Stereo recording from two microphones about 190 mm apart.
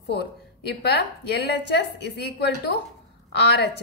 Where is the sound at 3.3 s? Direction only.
60° left (ahead or behind).